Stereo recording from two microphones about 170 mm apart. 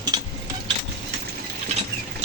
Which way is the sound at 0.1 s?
25° right (ahead or behind).